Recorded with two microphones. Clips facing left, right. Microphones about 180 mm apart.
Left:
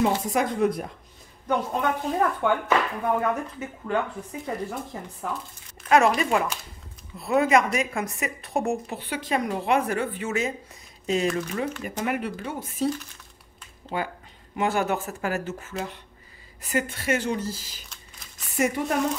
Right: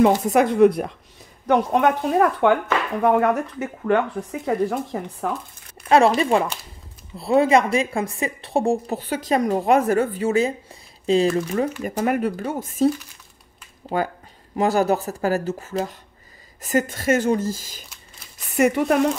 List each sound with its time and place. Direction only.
0.0 s speech: 60° right (ahead or behind)
5.9 s a woman's voice: 30° right (ahead or behind)
13.9 s a woman's voice: 45° right (ahead or behind)
18.5 s speech: 65° right (ahead or behind)